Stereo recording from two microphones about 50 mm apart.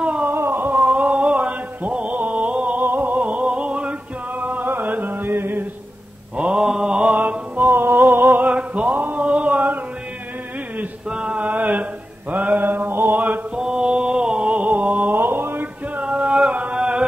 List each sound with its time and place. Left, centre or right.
0.3 s a sound: right
0.7 s a sound: right
1.5 s mantra: right
2.8 s music: right
3.5 s music: right
4.4 s music: right
6.3 s mantra: centre
7.7 s music: right
9.2 s a sound: right
11.3 s mantra: right
13.6 s mantra: centre; by 15.0 s right
15.0 s mantra: right
16.1 s music: right